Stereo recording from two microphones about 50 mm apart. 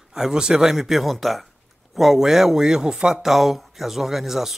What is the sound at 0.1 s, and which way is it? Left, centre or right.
Speech, centre.